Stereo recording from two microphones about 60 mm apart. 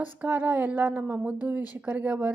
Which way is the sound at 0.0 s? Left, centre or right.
Right.